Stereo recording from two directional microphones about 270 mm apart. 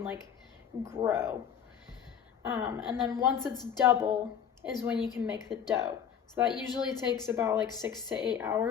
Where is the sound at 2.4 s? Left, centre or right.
Centre.